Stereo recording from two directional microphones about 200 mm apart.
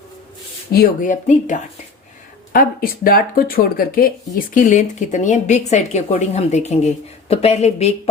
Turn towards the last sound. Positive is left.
turn(degrees=35)  # may be behind; listen again after turning